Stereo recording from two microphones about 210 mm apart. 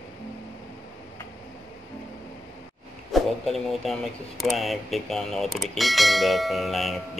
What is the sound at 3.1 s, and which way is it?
Speech, centre (ahead or behind).